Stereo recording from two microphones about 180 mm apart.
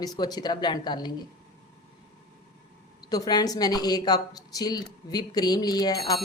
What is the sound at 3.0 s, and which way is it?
Speech, 20° left (ahead or behind).